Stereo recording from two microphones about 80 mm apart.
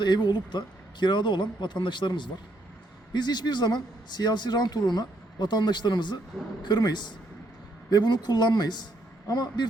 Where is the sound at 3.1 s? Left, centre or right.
Left.